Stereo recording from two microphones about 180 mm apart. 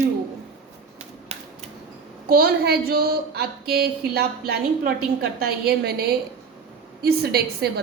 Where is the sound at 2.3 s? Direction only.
60° right (ahead or behind).